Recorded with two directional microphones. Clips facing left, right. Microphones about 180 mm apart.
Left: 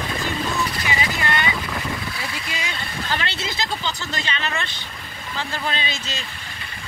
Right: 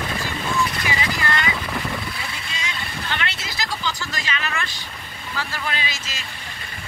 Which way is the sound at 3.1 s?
30° left (ahead or behind).